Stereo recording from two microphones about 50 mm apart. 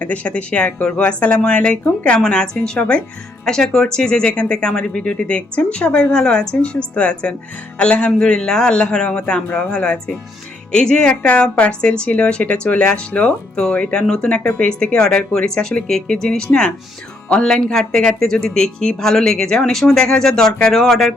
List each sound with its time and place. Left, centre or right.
0.0 s speech: left
14.3 s speech: left; by 21.1 s centre